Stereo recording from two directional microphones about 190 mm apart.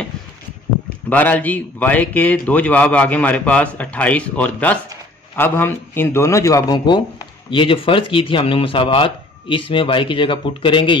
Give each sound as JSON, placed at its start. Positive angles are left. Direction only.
{"t": 1.1, "sound": "a man's voice", "side_deg": 10}